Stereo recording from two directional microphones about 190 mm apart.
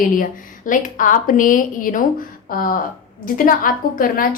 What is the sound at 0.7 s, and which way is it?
Speech, 45° left (ahead or behind).